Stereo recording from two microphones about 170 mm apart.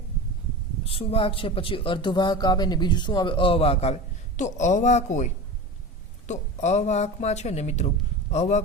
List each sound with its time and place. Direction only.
0.9 s a man's voice: 35° left (ahead or behind)